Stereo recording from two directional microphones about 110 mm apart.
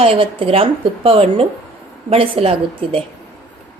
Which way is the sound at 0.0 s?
55° right (ahead or behind).